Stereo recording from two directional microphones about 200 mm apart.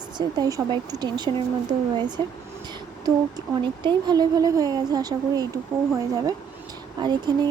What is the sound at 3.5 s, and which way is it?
Speech, 20° right (ahead or behind).